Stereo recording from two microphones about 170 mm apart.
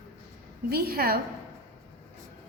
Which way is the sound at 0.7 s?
65° right (ahead or behind).